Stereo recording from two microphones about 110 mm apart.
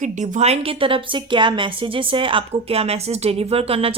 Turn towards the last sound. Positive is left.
turn(degrees=-60)  # may be behind; listen again after turning